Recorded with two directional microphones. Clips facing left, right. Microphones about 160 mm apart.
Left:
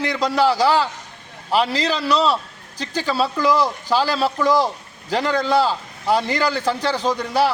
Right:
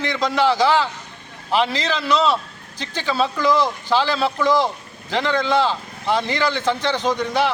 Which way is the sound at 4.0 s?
40° left (ahead or behind).